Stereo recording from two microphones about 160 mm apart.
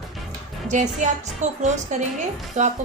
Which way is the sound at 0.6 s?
50° right (ahead or behind).